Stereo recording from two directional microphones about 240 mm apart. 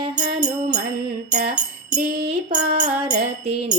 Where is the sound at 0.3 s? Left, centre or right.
Right.